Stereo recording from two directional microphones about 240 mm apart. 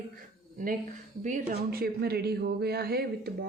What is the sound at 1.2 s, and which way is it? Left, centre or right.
Speech, right.